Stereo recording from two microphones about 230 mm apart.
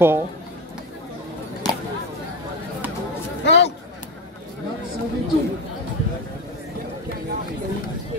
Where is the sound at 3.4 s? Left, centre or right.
Left.